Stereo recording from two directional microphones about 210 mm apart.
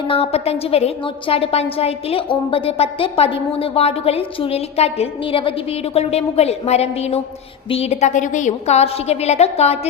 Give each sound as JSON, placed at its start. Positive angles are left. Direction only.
{"t": 0.1, "sound": "a woman's voice", "side_deg": 30}